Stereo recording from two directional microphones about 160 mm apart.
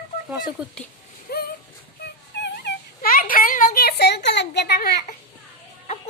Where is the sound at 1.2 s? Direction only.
75° left (ahead or behind).